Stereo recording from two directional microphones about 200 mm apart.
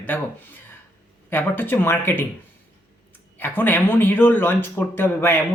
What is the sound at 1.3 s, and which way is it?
A man's voice, 10° left (ahead or behind).